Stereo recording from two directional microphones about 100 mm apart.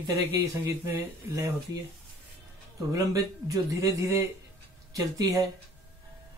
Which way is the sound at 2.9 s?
35° right (ahead or behind).